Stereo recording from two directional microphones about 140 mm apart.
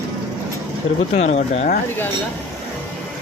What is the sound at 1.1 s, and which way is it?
Speech, 55° left (ahead or behind).